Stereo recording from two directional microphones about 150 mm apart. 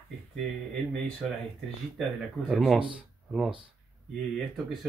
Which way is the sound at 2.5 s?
Centre (ahead or behind).